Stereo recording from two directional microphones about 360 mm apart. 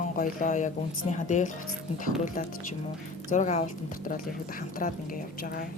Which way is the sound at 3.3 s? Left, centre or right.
Centre.